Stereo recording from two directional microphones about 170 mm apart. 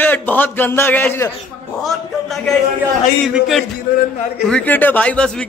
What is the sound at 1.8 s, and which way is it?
A man's voice, centre (ahead or behind).